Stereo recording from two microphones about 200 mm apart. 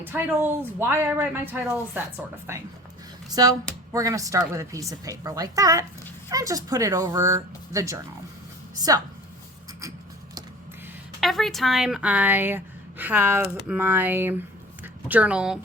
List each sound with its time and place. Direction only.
0.0 s speech: 10° right (ahead or behind)
11.2 s a woman's voice: centre (ahead or behind)